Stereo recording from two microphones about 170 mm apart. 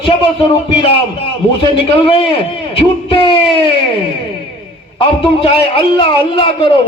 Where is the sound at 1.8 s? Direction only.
35° left (ahead or behind).